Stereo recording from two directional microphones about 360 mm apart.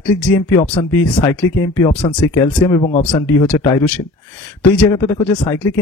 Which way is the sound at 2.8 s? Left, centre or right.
Centre.